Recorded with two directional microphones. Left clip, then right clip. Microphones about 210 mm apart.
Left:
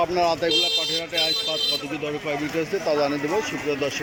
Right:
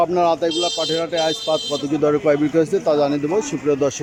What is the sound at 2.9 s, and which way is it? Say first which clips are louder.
Speech: right 5 dB; 15° right (ahead or behind).